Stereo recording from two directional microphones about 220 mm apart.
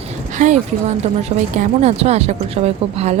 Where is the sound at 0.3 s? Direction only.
35° right (ahead or behind).